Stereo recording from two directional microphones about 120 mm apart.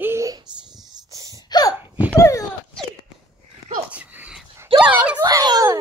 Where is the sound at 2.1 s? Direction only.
25° left (ahead or behind).